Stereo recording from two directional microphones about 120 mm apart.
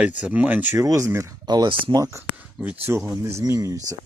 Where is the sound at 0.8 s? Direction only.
25° right (ahead or behind).